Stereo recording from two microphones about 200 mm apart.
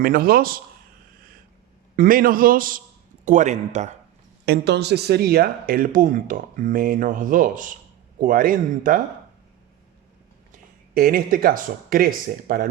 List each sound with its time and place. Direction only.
0.0 s speech: 45° right (ahead or behind)
2.0 s speech: 45° right (ahead or behind)
4.4 s speech: 55° right (ahead or behind)
10.9 s speech: 45° right (ahead or behind)